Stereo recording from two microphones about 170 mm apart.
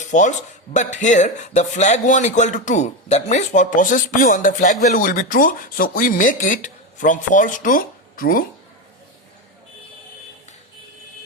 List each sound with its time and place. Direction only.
0.0 s speech: 45° left (ahead or behind)